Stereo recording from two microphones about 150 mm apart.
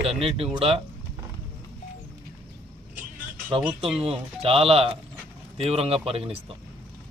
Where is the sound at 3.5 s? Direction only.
35° right (ahead or behind).